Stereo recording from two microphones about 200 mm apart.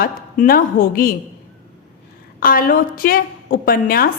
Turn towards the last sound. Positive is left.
turn(degrees=45)  # may be behind; listen again after turning